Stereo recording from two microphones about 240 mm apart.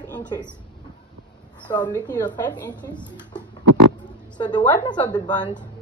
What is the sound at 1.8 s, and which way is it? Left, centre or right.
A woman's voice, centre.